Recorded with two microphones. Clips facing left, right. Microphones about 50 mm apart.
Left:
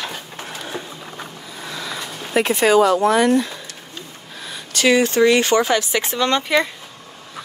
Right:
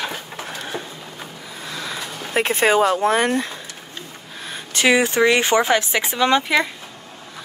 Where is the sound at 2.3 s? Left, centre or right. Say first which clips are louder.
Left 2 dB; right.